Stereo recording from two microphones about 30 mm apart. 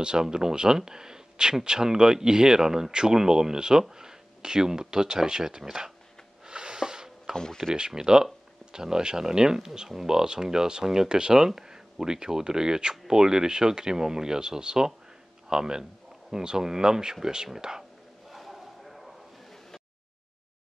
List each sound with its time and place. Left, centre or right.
0.0 s speech: right
6.4 s a sound: right
7.3 s speech: centre
7.7 s speech: right
18.3 s bow-wow: centre